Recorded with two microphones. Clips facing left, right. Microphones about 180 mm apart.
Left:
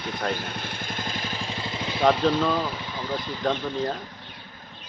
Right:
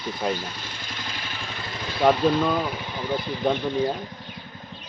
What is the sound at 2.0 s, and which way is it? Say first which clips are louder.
Speech: right 2 dB; 10° right (ahead or behind).